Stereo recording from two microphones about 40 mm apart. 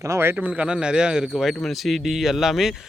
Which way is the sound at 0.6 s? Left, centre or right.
Right.